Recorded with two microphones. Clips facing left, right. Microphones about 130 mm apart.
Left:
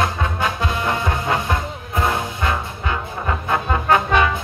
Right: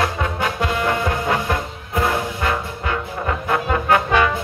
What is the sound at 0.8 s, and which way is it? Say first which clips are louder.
Music: right 1 dB; 25° left (ahead or behind).